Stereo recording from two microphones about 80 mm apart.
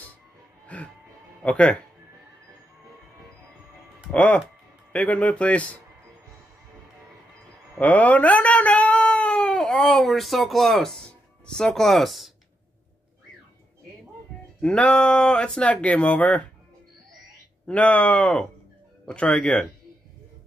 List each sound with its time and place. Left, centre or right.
0.7 s speech: centre
4.1 s speech: centre
7.7 s a sound: centre
10.0 s speech: centre
14.6 s speech: centre
17.6 s speech: centre